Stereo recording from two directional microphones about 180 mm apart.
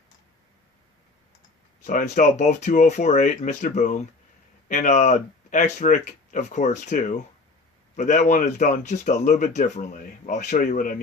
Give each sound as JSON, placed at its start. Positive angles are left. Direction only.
{"t": 1.8, "sound": "speech", "side_deg": 45}